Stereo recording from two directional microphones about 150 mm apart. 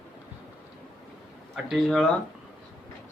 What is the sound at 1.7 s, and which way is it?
Speech, centre (ahead or behind).